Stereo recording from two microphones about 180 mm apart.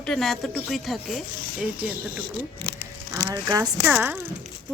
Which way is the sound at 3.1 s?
20° right (ahead or behind).